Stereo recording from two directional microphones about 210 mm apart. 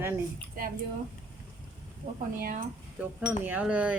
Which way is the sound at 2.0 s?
35° right (ahead or behind).